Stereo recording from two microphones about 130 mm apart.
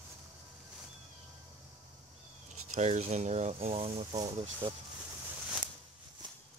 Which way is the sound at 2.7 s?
65° right (ahead or behind).